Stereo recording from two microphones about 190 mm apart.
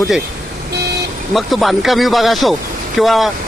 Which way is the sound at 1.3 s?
Centre (ahead or behind).